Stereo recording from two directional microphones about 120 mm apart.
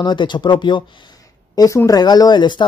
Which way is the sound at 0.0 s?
40° left (ahead or behind).